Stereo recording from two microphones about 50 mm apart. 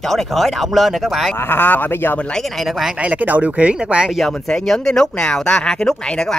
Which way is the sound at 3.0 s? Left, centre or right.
Right.